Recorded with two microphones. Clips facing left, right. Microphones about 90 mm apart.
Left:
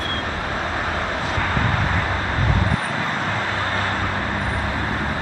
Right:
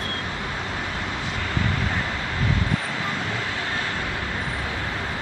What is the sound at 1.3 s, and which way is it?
Vehicle, 50° left (ahead or behind).